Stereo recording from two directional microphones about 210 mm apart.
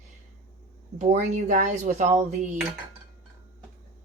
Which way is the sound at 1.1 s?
35° right (ahead or behind).